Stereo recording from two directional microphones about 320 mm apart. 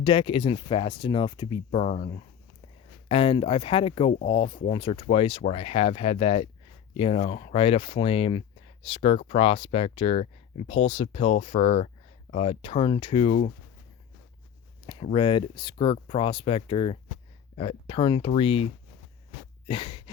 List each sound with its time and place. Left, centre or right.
0.0 s speech: centre
14.8 s speech: centre
19.6 s a sound: centre